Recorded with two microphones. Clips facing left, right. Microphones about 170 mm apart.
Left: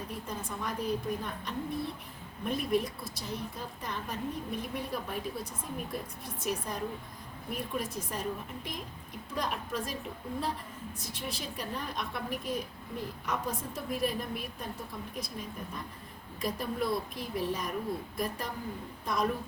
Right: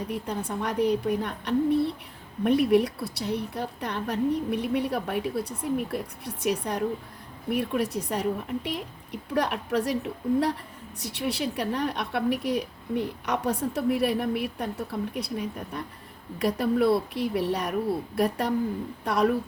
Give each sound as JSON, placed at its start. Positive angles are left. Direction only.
{"t": 0.1, "sound": "a woman's voice", "side_deg": -70}
{"t": 11.0, "sound": "a woman's voice", "side_deg": -70}